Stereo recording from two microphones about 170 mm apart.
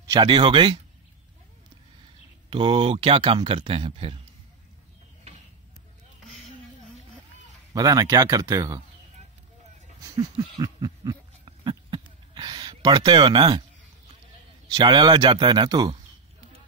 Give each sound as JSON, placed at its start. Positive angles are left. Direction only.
{"t": 0.0, "sound": "speech", "side_deg": -25}
{"t": 2.5, "sound": "speech", "side_deg": -30}
{"t": 7.7, "sound": "speech", "side_deg": -20}
{"t": 10.1, "sound": "a sound", "side_deg": -25}
{"t": 14.7, "sound": "speech", "side_deg": -25}